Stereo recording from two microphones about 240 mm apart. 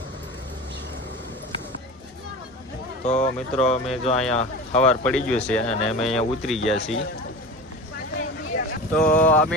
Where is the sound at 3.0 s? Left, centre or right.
Left.